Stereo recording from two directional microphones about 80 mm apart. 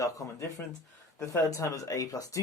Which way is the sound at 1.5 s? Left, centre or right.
Left.